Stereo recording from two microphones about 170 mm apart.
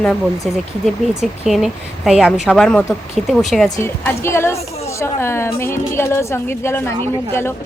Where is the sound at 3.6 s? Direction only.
15° left (ahead or behind).